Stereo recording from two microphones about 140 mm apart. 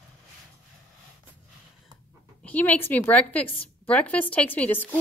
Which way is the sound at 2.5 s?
10° left (ahead or behind).